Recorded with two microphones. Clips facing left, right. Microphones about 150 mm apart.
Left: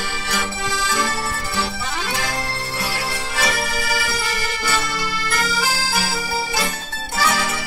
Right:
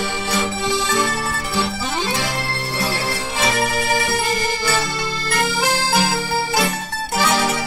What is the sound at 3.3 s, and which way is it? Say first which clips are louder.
Music: right 4 dB; 25° right (ahead or behind).